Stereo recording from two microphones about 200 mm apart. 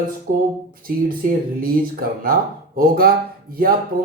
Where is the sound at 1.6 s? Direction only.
45° right (ahead or behind).